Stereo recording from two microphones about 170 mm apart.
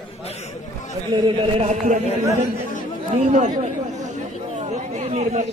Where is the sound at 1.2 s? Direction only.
40° right (ahead or behind).